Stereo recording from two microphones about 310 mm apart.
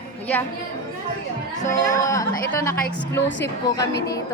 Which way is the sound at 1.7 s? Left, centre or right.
Centre.